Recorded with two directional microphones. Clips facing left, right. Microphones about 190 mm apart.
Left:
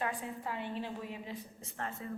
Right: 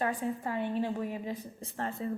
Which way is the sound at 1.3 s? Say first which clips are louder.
Right 6 dB; 35° right (ahead or behind).